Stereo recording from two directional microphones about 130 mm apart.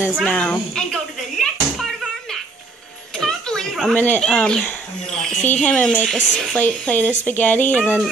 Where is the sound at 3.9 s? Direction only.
10° left (ahead or behind).